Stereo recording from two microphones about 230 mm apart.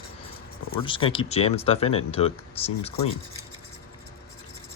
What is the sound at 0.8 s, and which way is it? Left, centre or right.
Speech, left.